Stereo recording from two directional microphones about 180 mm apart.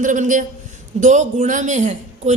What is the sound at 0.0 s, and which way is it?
A woman's voice, 45° right (ahead or behind).